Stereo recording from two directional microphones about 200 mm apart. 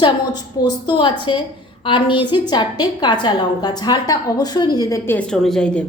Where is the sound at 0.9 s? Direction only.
25° left (ahead or behind); by 5.8 s 5° left (ahead or behind).